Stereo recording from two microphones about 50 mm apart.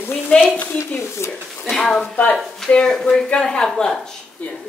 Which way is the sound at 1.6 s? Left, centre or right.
Centre.